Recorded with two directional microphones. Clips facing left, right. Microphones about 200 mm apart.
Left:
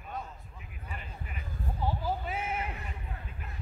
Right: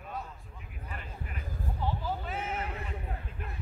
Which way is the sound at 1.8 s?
10° left (ahead or behind).